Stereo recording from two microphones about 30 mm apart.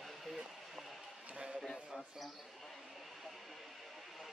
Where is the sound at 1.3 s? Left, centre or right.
Right.